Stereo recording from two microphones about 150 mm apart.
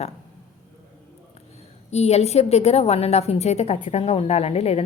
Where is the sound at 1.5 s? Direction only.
45° left (ahead or behind).